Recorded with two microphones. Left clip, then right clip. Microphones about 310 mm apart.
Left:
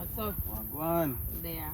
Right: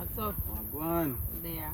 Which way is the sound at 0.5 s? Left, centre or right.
Centre.